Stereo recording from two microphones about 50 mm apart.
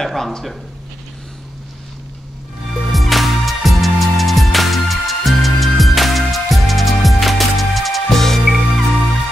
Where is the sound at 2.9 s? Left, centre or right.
Centre.